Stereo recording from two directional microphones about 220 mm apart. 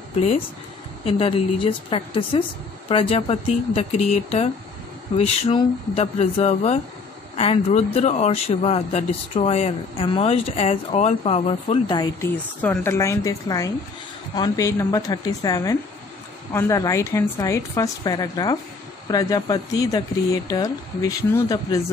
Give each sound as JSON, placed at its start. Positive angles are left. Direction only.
{"t": 1.0, "sound": "a woman's voice", "side_deg": 25}